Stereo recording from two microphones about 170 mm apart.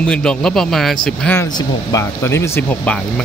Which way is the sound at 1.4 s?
20° left (ahead or behind).